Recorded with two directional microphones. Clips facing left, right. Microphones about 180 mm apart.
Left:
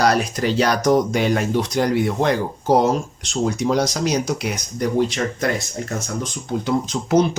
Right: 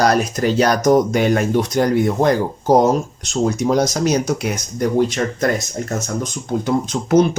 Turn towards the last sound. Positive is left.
turn(degrees=-50)  # may be behind; listen again after turning